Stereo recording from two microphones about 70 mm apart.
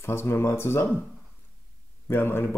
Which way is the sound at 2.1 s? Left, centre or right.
Left.